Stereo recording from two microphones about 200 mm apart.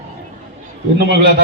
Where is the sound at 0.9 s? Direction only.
55° right (ahead or behind).